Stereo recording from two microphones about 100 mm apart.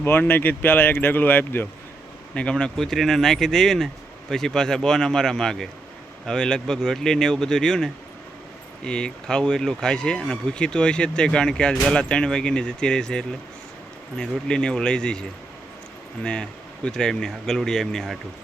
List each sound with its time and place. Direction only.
0.0 s speech: 20° left (ahead or behind)
16.2 s speech: 10° left (ahead or behind)